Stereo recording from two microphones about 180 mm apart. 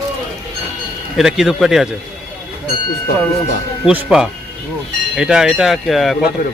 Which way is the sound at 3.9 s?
5° right (ahead or behind).